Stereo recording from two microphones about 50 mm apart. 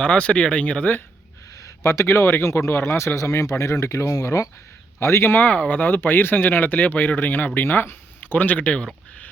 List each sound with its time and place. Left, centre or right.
0.0 s speech: left
1.8 s speech: left
3.2 s speech: left
3.6 s speech: left
4.9 s speech: left
5.3 s speech: left